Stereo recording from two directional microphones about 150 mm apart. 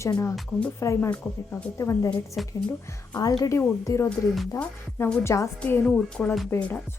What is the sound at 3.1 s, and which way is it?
Speech, 25° left (ahead or behind).